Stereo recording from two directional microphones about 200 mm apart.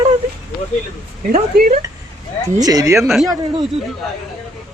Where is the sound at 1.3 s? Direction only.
45° right (ahead or behind).